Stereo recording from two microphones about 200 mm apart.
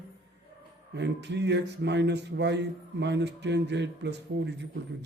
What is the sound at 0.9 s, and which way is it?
Speech, 60° right (ahead or behind).